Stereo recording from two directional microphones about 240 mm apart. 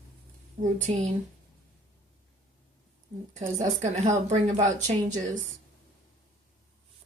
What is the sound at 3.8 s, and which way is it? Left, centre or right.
Speech, right.